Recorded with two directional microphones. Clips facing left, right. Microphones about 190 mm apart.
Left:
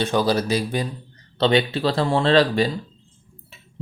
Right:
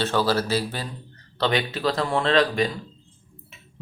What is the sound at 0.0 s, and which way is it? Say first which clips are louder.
Speech: left 2 dB; 15° left (ahead or behind).